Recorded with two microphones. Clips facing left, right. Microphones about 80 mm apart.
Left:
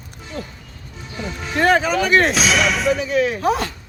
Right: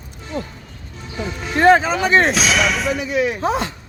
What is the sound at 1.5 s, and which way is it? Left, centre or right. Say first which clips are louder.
Speech: right 3 dB; right.